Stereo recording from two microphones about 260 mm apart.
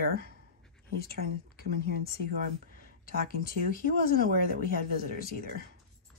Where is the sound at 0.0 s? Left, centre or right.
Right.